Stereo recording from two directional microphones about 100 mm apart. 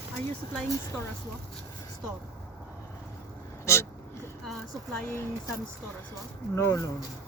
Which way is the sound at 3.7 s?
25° left (ahead or behind).